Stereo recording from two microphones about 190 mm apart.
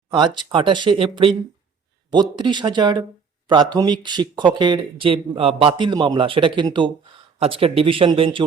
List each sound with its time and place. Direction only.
0.1 s speech: 25° right (ahead or behind)
2.4 s speech: 25° right (ahead or behind)